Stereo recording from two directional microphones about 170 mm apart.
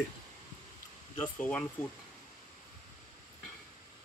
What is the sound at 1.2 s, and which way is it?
Speech, 10° left (ahead or behind).